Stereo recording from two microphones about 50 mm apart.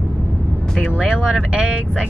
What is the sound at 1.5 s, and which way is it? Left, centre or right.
Speech, right.